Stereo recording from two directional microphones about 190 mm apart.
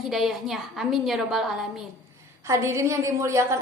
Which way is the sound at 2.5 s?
15° right (ahead or behind).